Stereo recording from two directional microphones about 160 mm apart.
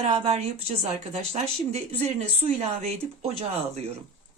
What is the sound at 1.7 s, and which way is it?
Speech, 40° right (ahead or behind).